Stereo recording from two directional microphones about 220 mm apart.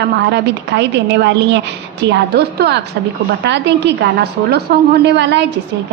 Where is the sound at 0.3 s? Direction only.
50° right (ahead or behind).